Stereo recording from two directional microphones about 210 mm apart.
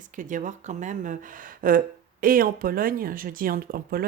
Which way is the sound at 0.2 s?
40° right (ahead or behind).